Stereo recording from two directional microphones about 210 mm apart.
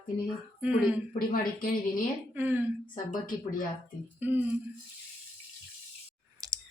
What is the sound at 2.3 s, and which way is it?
Speech, 10° right (ahead or behind).